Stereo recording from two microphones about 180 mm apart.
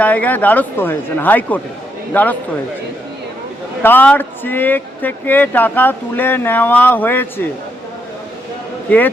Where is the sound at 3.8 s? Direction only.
10° left (ahead or behind).